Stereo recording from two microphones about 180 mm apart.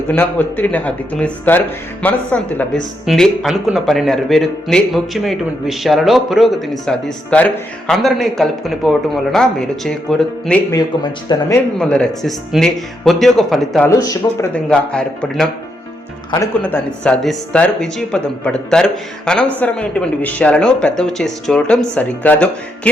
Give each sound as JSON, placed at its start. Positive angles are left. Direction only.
{"t": 0.1, "sound": "speech", "side_deg": 10}
{"t": 10.7, "sound": "speech", "side_deg": 25}
{"t": 11.8, "sound": "speech", "side_deg": 5}
{"t": 13.8, "sound": "speech", "side_deg": 20}
{"t": 14.5, "sound": "speech", "side_deg": 5}
{"t": 16.6, "sound": "speech", "side_deg": 10}